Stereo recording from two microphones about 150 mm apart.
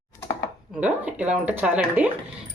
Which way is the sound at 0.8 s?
10° right (ahead or behind).